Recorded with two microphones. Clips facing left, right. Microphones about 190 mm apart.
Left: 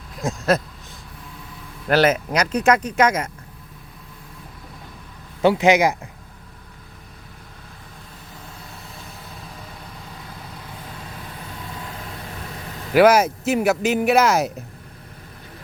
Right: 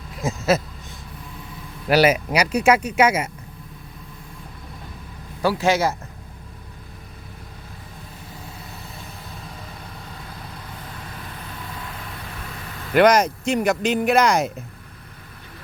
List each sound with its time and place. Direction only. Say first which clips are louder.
0.2 s speech: even; 5° right (ahead or behind)
1.9 s speech: right 1 dB; 10° right (ahead or behind)
5.4 s a man's voice: left 4 dB; 20° left (ahead or behind)
12.9 s speech: left 1 dB; 5° left (ahead or behind)